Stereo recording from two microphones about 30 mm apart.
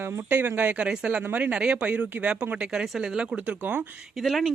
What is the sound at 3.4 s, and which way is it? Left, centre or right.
Speech, right.